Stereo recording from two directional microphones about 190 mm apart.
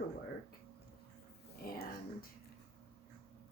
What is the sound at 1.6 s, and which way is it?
Speech, 50° left (ahead or behind).